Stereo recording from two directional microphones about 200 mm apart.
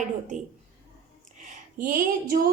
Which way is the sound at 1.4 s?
40° right (ahead or behind).